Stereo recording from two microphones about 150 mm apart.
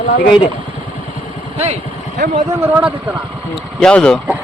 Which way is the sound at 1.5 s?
45° right (ahead or behind).